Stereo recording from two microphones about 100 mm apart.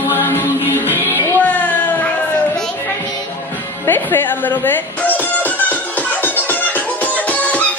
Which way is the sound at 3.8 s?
20° left (ahead or behind).